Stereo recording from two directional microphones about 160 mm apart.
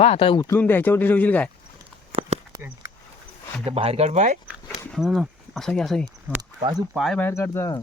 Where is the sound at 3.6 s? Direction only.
35° right (ahead or behind).